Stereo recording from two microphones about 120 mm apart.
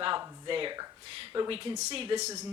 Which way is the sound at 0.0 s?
45° right (ahead or behind).